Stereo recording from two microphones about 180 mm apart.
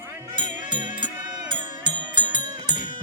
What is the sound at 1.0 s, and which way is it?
Music, 25° right (ahead or behind).